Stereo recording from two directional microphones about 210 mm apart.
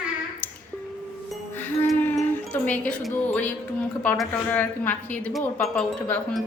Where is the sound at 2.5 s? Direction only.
10° left (ahead or behind).